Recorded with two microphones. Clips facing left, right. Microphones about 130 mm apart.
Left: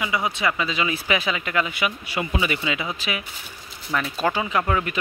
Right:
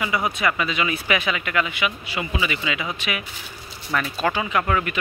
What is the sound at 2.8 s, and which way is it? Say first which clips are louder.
Speech: right 1 dB; 30° left (ahead or behind).